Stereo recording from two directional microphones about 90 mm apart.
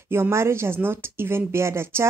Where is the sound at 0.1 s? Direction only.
30° right (ahead or behind).